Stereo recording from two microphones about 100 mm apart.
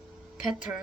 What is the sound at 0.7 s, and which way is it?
Speech, 25° right (ahead or behind).